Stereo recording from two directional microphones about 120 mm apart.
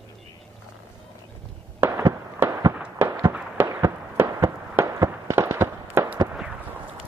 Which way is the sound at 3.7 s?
25° right (ahead or behind).